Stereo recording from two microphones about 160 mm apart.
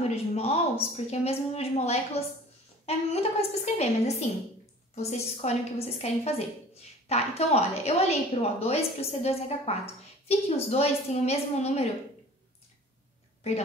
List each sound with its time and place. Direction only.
0.1 s a woman's voice: 40° left (ahead or behind)
3.1 s a woman's voice: 40° left (ahead or behind)